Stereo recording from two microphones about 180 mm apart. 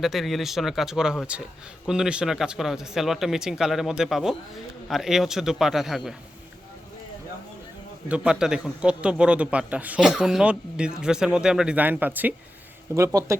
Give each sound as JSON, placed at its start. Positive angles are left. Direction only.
{"t": 0.0, "sound": "a man's voice", "side_deg": 0}
{"t": 8.0, "sound": "a man's voice", "side_deg": -5}